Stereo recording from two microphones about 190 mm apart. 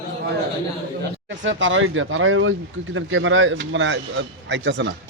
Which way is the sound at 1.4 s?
80° right.